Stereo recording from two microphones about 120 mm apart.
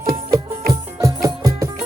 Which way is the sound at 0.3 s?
30° right (ahead or behind).